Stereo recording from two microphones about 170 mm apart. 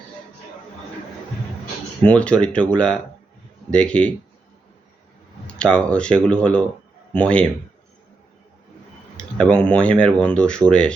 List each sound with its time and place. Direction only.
2.0 s speech: 5° left (ahead or behind)
5.5 s speech: 5° left (ahead or behind)
9.1 s speech: 5° left (ahead or behind)